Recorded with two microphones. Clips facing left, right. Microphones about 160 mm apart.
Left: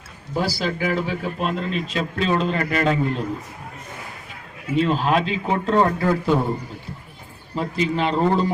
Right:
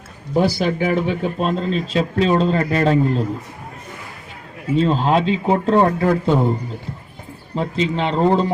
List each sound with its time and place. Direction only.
0.3 s speech: 20° right (ahead or behind)
1.5 s a man's voice: 35° right (ahead or behind)
4.8 s speech: 30° right (ahead or behind)
6.1 s speech: 20° right (ahead or behind)
7.5 s speech: 20° right (ahead or behind)